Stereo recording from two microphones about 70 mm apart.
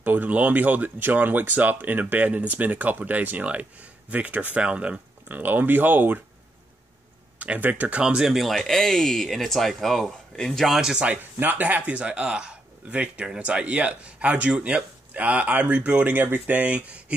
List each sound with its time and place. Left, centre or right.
0.0 s speech: right
7.3 s speech: right
11.1 s speech: right
16.2 s speech: right